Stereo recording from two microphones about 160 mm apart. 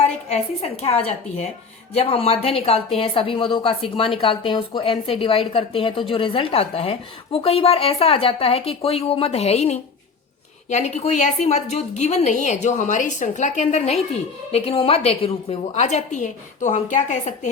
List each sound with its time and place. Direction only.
0.3 s a woman's voice: 40° left (ahead or behind)